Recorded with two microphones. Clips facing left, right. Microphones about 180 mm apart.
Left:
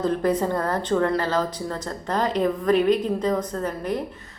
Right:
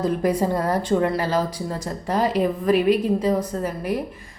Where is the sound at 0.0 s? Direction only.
10° right (ahead or behind).